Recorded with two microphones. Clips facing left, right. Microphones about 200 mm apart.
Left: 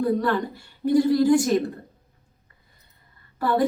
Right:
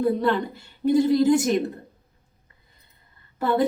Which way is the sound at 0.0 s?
25° right (ahead or behind).